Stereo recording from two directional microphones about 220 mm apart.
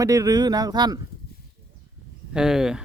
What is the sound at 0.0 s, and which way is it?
Speech, 15° right (ahead or behind).